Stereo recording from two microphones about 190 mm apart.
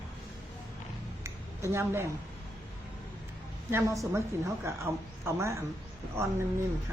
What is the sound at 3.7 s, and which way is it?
Speech, 15° right (ahead or behind).